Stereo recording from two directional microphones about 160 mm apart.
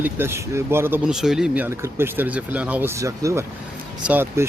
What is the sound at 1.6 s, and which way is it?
Speech, 15° right (ahead or behind).